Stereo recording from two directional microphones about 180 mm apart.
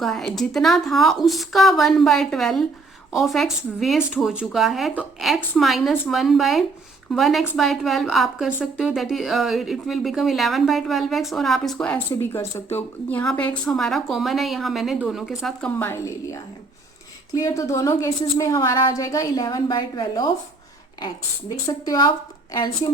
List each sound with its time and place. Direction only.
0.0 s a woman's voice: centre (ahead or behind)
15.8 s a woman's voice: 15° left (ahead or behind)
21.5 s a woman's voice: 20° left (ahead or behind)